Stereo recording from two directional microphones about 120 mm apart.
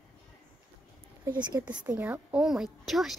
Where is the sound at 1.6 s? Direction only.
20° right (ahead or behind).